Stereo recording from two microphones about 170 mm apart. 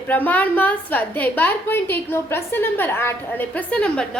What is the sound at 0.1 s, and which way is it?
A woman's voice, 10° left (ahead or behind).